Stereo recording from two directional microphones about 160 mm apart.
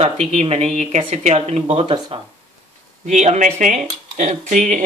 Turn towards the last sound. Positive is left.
turn(degrees=-50)  # may be behind; listen again after turning